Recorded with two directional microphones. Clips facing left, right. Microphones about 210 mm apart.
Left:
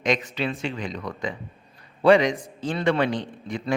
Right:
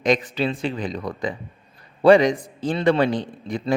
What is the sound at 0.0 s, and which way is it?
A man's voice, 35° right (ahead or behind).